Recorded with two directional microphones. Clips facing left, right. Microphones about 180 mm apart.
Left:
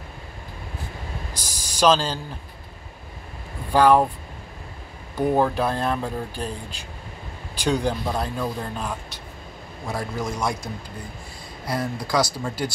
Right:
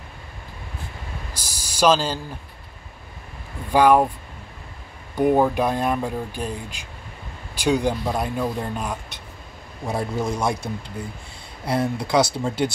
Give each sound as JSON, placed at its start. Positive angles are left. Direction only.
{"t": 1.5, "sound": "a sound", "side_deg": -10}
{"t": 3.7, "sound": "speech", "side_deg": -10}
{"t": 5.2, "sound": "speech", "side_deg": -10}
{"t": 7.5, "sound": "speech", "side_deg": -10}
{"t": 9.8, "sound": "speech", "side_deg": -25}